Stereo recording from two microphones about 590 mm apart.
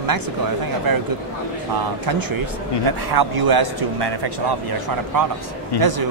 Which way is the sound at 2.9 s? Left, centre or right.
Right.